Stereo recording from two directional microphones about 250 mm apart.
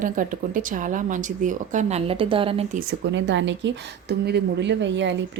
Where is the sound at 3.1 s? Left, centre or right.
Right.